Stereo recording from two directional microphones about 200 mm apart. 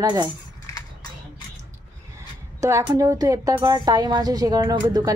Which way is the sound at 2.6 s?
15° right (ahead or behind).